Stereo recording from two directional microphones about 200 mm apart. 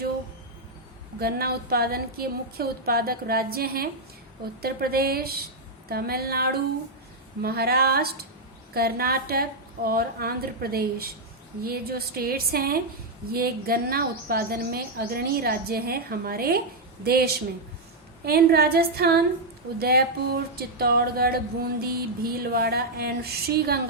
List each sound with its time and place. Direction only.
1.2 s music: 50° right (ahead or behind)